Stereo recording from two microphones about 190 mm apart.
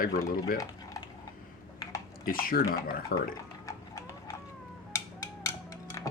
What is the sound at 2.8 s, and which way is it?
Dishes, 50° left (ahead or behind).